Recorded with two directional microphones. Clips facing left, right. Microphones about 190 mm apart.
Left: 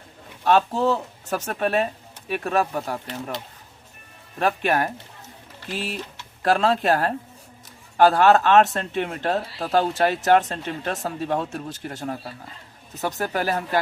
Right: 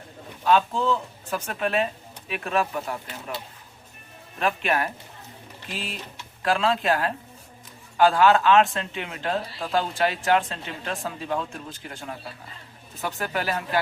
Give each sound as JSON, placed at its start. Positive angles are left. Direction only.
{"t": 0.4, "sound": "speech", "side_deg": 45}
{"t": 4.4, "sound": "speech", "side_deg": 40}
{"t": 6.4, "sound": "speech", "side_deg": 40}